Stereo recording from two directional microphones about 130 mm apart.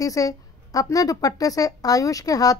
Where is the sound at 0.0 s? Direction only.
25° left (ahead or behind).